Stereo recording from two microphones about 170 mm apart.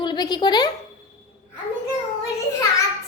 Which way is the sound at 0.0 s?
25° left (ahead or behind).